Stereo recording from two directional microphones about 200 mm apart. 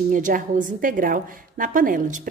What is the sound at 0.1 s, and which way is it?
A woman's voice, 40° right (ahead or behind).